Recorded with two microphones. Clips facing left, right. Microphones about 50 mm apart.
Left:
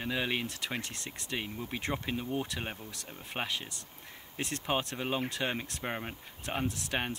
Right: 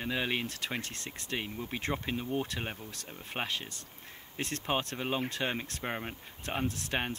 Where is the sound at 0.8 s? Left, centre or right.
Right.